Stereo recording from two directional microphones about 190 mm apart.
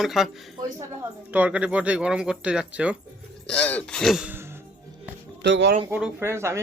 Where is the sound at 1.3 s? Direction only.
5° right (ahead or behind).